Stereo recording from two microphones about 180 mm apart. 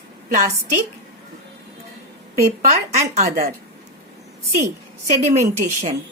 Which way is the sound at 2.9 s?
35° right (ahead or behind).